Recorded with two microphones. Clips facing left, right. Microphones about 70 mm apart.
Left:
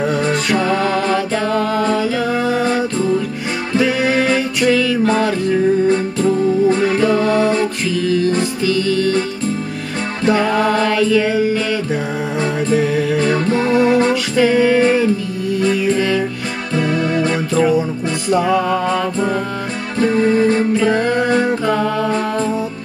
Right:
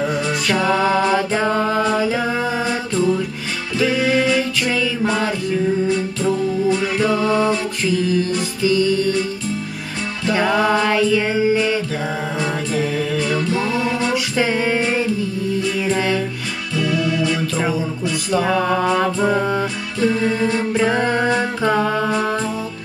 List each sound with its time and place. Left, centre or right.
0.7 s mantra: centre
3.7 s music: left
4.6 s music: centre
5.9 s music: left
10.4 s music: centre
13.2 s music: left
14.3 s music: centre
15.8 s music: centre
16.7 s music: left
18.9 s music: centre
20.0 s music: left
20.9 s music: right